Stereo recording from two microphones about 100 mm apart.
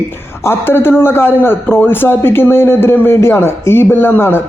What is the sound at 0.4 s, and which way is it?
A man's voice, 20° left (ahead or behind).